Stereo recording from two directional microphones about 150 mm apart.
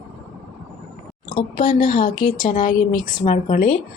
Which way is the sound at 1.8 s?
70° left (ahead or behind).